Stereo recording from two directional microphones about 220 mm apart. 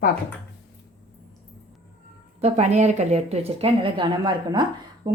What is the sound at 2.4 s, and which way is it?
A woman's voice, 30° right (ahead or behind).